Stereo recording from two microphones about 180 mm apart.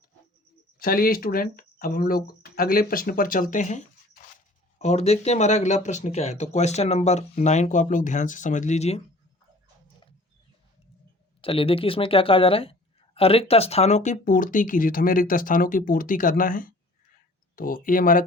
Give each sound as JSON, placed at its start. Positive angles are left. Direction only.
{"t": 0.8, "sound": "speech", "side_deg": 55}
{"t": 11.3, "sound": "speech", "side_deg": 30}